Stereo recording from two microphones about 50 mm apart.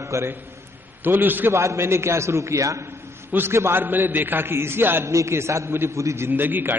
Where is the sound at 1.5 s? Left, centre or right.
Right.